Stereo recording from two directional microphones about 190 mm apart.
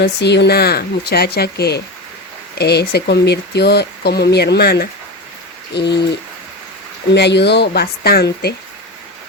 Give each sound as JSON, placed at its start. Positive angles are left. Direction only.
{"t": 0.0, "sound": "speech", "side_deg": 65}
{"t": 7.1, "sound": "speech", "side_deg": 65}